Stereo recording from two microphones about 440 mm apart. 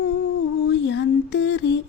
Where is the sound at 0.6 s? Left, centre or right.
Left.